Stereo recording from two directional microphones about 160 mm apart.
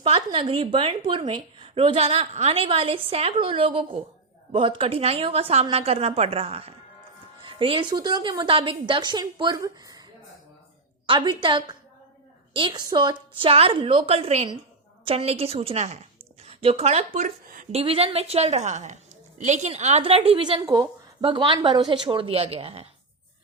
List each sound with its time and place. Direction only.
0.0 s a woman's voice: 35° right (ahead or behind)
11.0 s speech: 30° right (ahead or behind); by 17.7 s 55° right (ahead or behind)
17.7 s speech: 40° right (ahead or behind)